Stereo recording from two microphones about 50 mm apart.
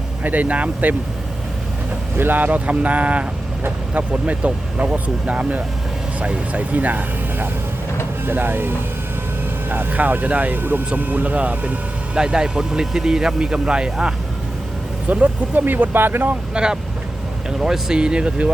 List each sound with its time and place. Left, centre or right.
0.2 s speech: right
2.1 s speech: right
10.9 s speech: right
12.1 s speech: centre
15.1 s speech: right
15.6 s speech: right
16.6 s speech: centre